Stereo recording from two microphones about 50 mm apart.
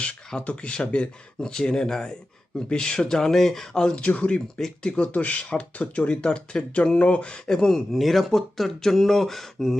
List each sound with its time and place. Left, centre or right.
0.4 s speech: left; by 9.7 s centre